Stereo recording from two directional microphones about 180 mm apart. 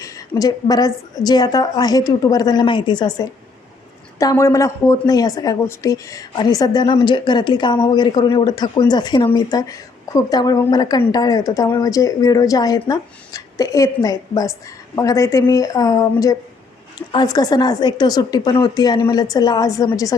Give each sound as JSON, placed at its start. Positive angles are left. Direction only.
{"t": 0.0, "sound": "a woman's voice", "side_deg": 20}